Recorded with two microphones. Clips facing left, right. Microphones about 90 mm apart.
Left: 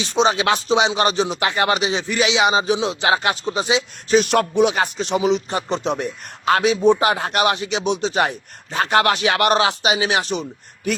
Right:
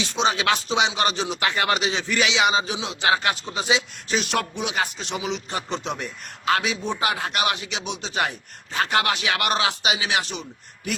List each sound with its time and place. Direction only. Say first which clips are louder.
0.0 s speech: left 5 dB; 30° left (ahead or behind)
4.4 s speech: left 9 dB; 40° left (ahead or behind)
5.7 s speech: left 9 dB; 25° left (ahead or behind)